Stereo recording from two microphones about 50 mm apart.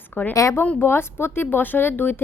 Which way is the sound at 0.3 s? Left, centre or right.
Left.